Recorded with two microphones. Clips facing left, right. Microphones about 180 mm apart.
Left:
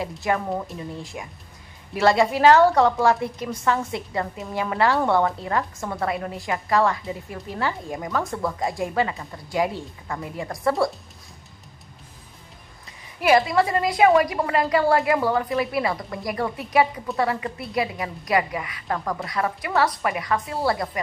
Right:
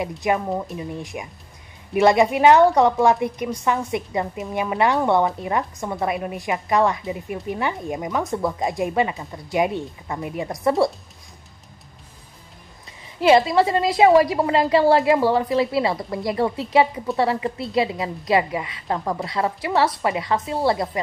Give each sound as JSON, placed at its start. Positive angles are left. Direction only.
{"t": 0.2, "sound": "a woman's voice", "side_deg": -20}
{"t": 13.2, "sound": "a woman's voice", "side_deg": -25}